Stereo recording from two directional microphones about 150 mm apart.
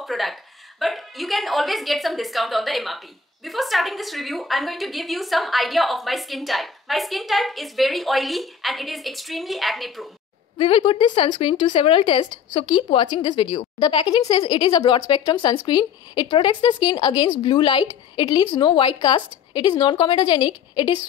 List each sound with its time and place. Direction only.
0.0 s a woman's voice: centre (ahead or behind)
10.6 s a woman's voice: 35° left (ahead or behind)